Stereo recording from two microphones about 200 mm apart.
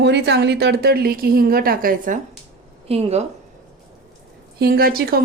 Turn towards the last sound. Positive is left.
turn(degrees=-50)  # may be behind; listen again after turning